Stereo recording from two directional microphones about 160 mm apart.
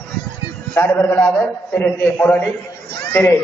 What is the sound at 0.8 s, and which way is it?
A man's voice, 10° left (ahead or behind).